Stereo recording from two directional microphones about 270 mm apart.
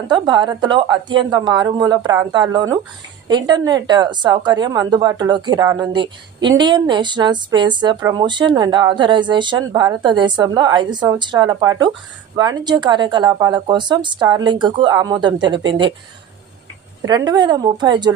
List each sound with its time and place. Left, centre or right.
0.1 s speech: centre
17.1 s speech: centre